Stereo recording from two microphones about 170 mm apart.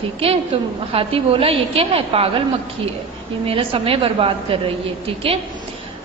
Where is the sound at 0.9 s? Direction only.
35° right (ahead or behind).